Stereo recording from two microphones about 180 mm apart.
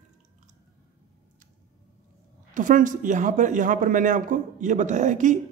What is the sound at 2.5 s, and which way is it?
A man's voice, 45° right (ahead or behind).